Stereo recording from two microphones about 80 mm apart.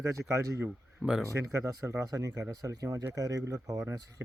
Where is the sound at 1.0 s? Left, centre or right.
Right.